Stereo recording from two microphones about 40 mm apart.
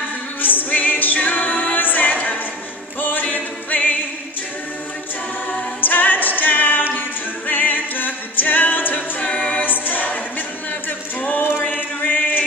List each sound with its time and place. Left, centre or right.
0.4 s music: left
5.8 s a capella: left
9.2 s a capella: left
9.6 s a capella: left
10.9 s a sound: left
12.0 s chant: left